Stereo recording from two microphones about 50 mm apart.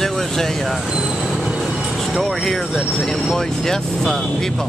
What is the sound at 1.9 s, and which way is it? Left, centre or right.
Speech, centre.